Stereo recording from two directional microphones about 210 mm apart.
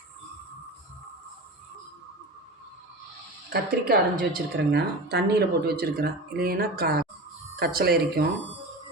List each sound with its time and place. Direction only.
3.5 s a woman's voice: 45° right (ahead or behind)